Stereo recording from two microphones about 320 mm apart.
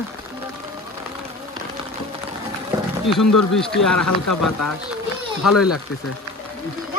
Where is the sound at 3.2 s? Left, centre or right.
Left.